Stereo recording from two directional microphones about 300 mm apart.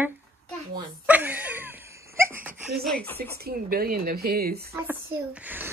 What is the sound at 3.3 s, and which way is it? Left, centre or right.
Speech, right.